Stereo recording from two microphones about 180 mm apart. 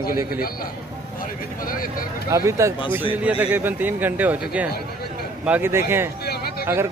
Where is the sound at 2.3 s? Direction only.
15° right (ahead or behind).